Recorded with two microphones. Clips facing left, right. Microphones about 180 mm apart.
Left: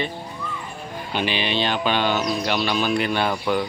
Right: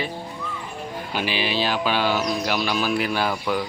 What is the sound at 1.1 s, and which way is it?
Speech, 5° right (ahead or behind).